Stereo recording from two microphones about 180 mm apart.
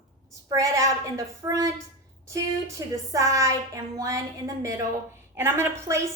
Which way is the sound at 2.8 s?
20° right (ahead or behind).